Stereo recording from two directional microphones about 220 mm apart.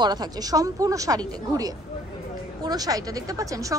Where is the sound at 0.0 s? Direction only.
20° right (ahead or behind).